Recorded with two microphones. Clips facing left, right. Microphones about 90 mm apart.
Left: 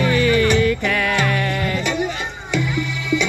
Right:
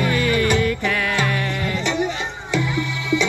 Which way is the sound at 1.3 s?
75° left (ahead or behind).